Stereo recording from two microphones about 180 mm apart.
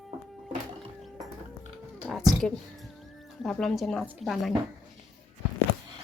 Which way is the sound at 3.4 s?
Centre (ahead or behind).